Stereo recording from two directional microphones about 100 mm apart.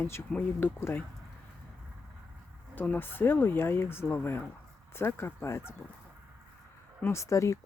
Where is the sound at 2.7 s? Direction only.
15° left (ahead or behind).